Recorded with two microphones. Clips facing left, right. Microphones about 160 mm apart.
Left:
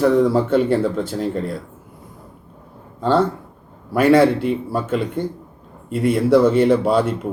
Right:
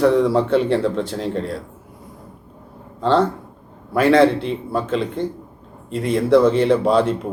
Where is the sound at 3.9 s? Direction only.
10° left (ahead or behind).